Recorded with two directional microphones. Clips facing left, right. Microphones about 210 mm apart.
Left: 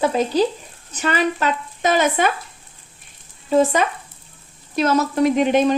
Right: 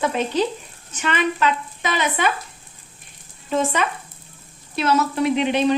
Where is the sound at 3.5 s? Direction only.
35° left (ahead or behind).